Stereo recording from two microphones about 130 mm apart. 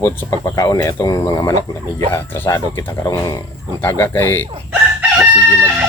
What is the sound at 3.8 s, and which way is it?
Speech, 20° left (ahead or behind).